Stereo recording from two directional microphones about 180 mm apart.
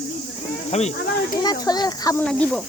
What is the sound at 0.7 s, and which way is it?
Speech, 35° left (ahead or behind).